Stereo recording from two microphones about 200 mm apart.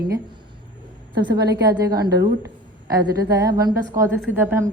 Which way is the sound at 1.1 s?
55° right (ahead or behind).